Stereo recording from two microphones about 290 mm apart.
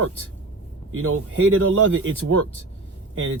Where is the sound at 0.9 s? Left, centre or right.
Right.